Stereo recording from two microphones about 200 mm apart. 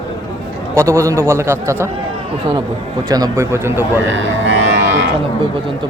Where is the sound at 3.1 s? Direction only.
20° right (ahead or behind).